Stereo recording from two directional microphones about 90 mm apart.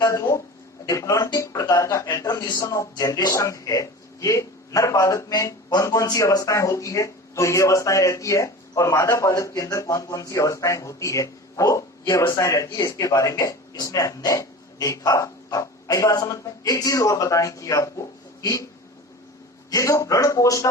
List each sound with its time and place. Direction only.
0.0 s a man's voice: 35° left (ahead or behind)
19.7 s a man's voice: 35° left (ahead or behind)